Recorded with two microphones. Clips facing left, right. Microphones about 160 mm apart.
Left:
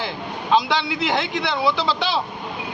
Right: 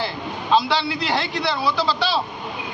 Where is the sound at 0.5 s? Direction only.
20° left (ahead or behind).